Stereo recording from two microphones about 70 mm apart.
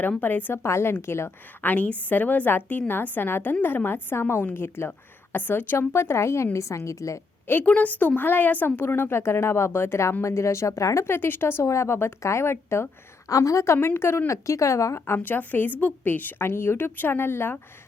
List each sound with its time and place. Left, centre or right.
0.2 s a woman's voice: left
0.6 s a woman's voice: left
1.6 s a woman's voice: left
5.9 s a woman's voice: left
7.4 s a woman's voice: left
11.1 s a woman's voice: left
13.2 s a woman's voice: left
13.7 s a woman's voice: left
14.4 s a woman's voice: left
14.9 s a woman's voice: left